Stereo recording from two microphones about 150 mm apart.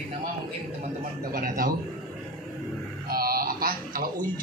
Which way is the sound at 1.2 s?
75° right (ahead or behind).